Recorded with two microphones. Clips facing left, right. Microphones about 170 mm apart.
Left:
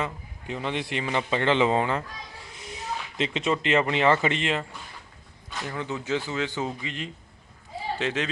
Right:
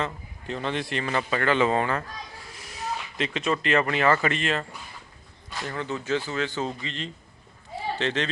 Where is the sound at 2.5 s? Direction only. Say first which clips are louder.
Left 2 dB; 25° left (ahead or behind).